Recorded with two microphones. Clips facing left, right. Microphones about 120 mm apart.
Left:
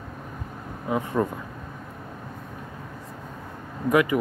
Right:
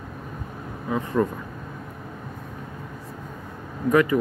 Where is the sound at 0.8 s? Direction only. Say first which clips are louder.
Right 1 dB; 15° left (ahead or behind).